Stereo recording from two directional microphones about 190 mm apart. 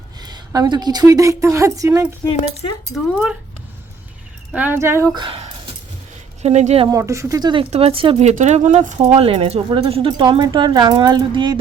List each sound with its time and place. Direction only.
0.2 s a woman's voice: 20° right (ahead or behind)
2.9 s speech: 5° right (ahead or behind)
4.5 s speech: 10° right (ahead or behind)
5.1 s a sound: 25° right (ahead or behind)
6.4 s speech: 35° right (ahead or behind)
6.8 s speech: 15° right (ahead or behind)